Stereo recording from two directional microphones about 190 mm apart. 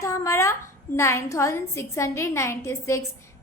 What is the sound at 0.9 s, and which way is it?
A woman's voice, 15° left (ahead or behind).